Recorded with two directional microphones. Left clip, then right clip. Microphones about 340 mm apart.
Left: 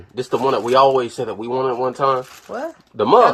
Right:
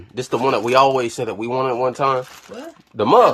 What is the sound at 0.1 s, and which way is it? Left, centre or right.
Speech, right.